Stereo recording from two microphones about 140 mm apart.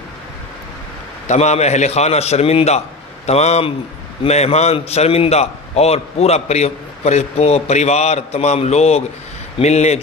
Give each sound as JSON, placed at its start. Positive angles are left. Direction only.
{"t": 1.2, "sound": "a man's voice", "side_deg": 55}